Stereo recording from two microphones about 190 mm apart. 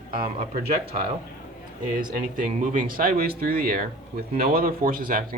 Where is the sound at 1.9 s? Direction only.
45° right (ahead or behind).